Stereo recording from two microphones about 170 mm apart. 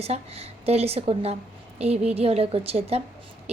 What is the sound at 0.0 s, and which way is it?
A woman's voice, 35° right (ahead or behind).